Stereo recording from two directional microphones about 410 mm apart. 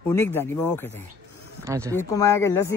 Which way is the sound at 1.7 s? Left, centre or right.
Centre.